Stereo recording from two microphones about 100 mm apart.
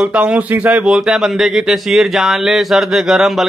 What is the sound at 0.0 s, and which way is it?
A man's voice, 10° right (ahead or behind).